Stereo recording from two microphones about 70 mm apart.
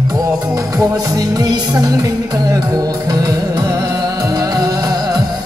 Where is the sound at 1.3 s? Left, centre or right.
Right.